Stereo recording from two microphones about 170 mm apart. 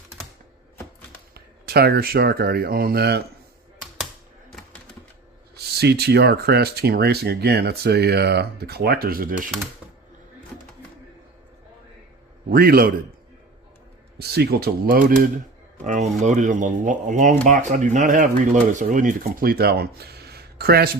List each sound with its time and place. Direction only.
1.3 s speech: 70° right (ahead or behind)
5.7 s speech: 70° right (ahead or behind)
12.5 s speech: 60° right (ahead or behind)
14.2 s speech: 65° right (ahead or behind)